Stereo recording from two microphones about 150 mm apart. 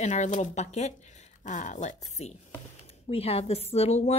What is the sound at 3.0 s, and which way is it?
Speech, 40° left (ahead or behind).